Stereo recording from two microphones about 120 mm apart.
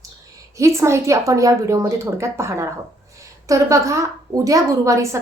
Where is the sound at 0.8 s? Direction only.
25° right (ahead or behind).